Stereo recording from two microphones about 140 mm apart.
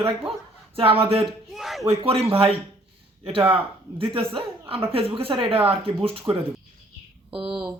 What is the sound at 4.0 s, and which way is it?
A man's voice, 40° right (ahead or behind).